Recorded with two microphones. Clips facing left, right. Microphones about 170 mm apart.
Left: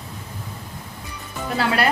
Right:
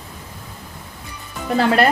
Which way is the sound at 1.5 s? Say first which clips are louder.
Right 5 dB; 45° right (ahead or behind).